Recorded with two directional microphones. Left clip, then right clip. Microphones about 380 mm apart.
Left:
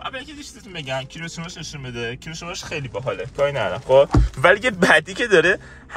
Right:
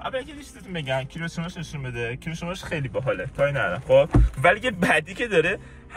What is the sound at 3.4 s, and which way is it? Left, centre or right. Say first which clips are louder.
Speech: left 4 dB; left.